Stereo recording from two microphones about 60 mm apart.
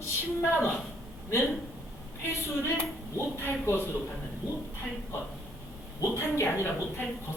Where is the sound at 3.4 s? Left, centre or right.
Left.